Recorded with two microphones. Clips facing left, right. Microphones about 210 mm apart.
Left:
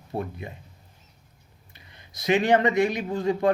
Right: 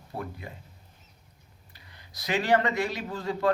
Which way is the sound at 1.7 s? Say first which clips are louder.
Left 2 dB; 20° left (ahead or behind).